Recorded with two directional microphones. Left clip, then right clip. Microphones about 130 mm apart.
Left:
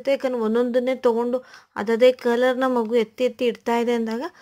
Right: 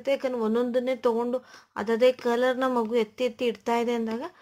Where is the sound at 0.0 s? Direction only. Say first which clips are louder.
Left 4 dB; 40° left (ahead or behind).